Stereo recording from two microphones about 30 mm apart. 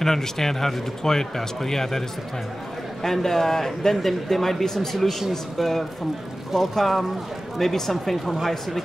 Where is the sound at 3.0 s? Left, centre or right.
Centre.